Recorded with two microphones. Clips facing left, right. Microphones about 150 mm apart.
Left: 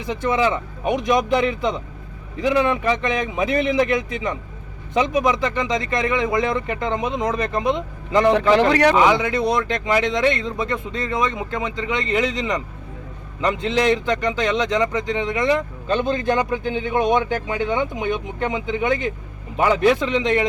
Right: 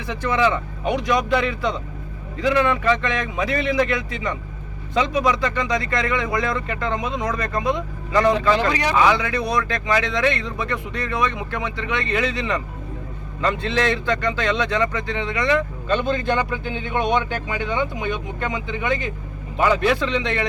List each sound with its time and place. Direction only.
0.0 s speech: 20° left (ahead or behind)
8.7 s a man's voice: 60° left (ahead or behind)
9.0 s speech: 20° left (ahead or behind)
19.5 s speech: 20° left (ahead or behind)